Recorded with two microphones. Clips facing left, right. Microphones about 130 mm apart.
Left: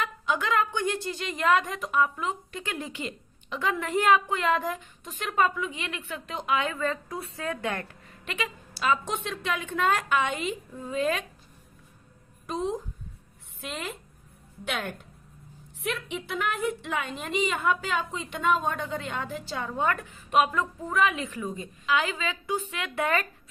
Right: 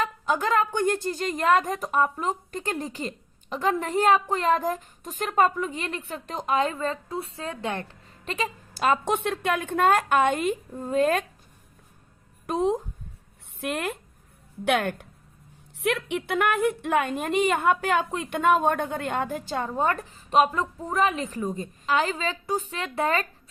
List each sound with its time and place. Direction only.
0.0 s a woman's voice: 40° right (ahead or behind)
8.7 s a woman's voice: 50° right (ahead or behind)
12.5 s a woman's voice: 60° right (ahead or behind); by 23.2 s 30° right (ahead or behind)